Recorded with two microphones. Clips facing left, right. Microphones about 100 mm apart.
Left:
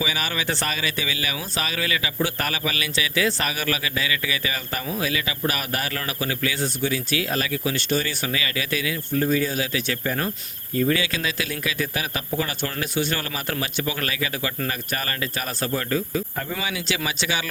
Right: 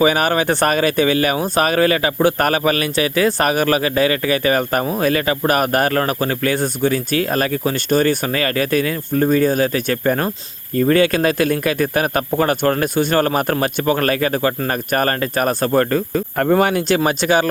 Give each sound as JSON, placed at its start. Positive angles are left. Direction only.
{"t": 0.0, "sound": "speech", "side_deg": -50}